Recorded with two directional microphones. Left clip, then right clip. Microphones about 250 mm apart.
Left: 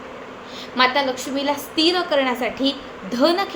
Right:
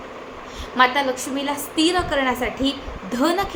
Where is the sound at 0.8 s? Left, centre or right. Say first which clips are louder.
Even; centre.